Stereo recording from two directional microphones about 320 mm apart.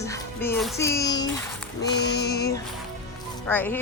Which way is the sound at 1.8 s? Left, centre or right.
Left.